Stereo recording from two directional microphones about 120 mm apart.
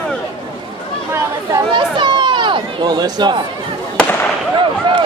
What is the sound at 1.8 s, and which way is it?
Chatter, 40° right (ahead or behind).